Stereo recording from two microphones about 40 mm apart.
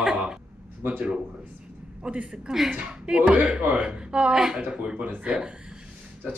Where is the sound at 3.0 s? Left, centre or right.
Right.